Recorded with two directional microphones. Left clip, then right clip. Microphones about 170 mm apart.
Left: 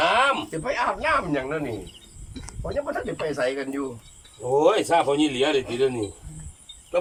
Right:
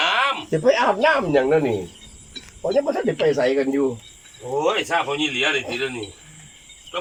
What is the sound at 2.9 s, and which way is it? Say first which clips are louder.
Speech: right 8 dB; 55° right (ahead or behind).